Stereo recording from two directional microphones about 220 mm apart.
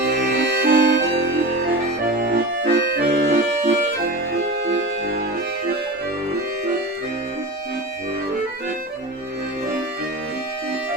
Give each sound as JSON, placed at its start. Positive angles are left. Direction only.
{"t": 0.0, "sound": "music", "side_deg": -50}
{"t": 2.2, "sound": "accordion", "side_deg": -45}
{"t": 4.0, "sound": "music", "side_deg": -45}